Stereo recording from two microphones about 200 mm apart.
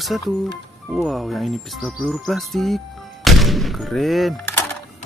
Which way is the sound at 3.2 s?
Centre (ahead or behind).